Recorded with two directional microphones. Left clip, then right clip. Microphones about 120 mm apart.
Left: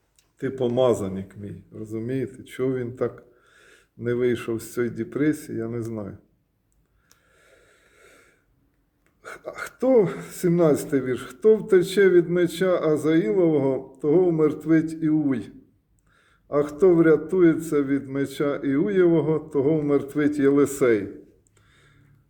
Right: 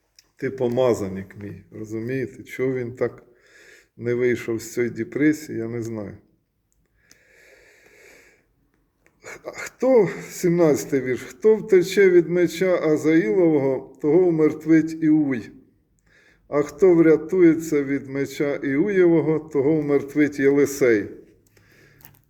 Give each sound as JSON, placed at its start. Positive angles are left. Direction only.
{"t": 0.2, "sound": "speech", "side_deg": 15}
{"t": 7.3, "sound": "wheeze", "side_deg": 15}
{"t": 9.2, "sound": "speech", "side_deg": 15}
{"t": 21.7, "sound": "a sound", "side_deg": 25}